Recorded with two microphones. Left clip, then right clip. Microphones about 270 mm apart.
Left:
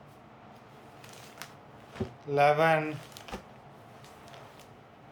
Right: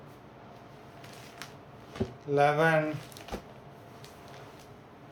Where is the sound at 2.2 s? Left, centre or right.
Centre.